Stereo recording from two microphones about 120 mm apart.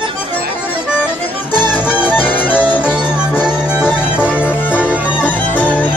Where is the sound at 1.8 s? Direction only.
15° left (ahead or behind).